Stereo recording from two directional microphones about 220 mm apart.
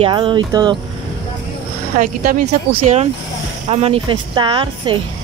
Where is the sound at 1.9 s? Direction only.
35° right (ahead or behind).